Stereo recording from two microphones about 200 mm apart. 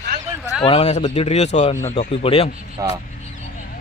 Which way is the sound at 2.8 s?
15° right (ahead or behind).